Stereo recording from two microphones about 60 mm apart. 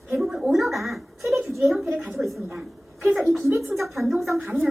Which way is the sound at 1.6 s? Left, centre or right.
Centre.